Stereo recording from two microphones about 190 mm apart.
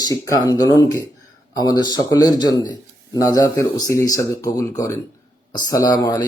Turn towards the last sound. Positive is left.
turn(degrees=20)  # may be behind; listen again after turning